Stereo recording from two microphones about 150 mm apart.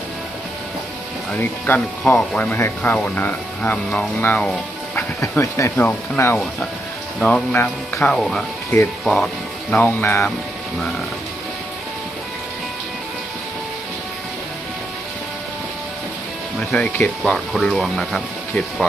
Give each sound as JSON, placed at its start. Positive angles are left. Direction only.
{"t": 1.3, "sound": "speech", "side_deg": 10}
{"t": 6.3, "sound": "speech", "side_deg": 0}
{"t": 16.6, "sound": "speech", "side_deg": 5}